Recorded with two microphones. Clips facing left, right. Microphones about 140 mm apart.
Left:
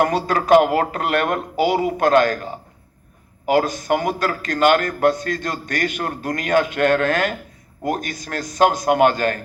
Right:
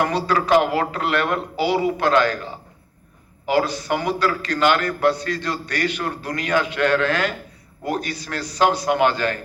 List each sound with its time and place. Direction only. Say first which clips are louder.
0.0 s a man's voice: left 2 dB; 45° left (ahead or behind)